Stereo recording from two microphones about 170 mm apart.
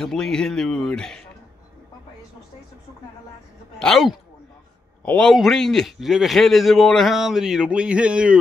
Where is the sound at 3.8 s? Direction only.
Centre (ahead or behind).